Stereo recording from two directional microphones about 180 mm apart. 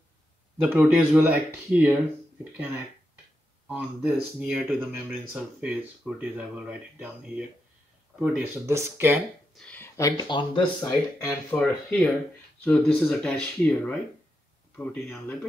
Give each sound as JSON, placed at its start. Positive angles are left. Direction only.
{"t": 0.6, "sound": "speech", "side_deg": -10}
{"t": 3.6, "sound": "speech", "side_deg": -5}
{"t": 9.5, "sound": "speech", "side_deg": 5}
{"t": 11.2, "sound": "speech", "side_deg": 5}